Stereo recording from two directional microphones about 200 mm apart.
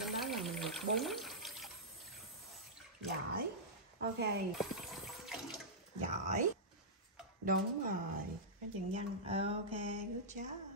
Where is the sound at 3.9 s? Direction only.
55° right (ahead or behind).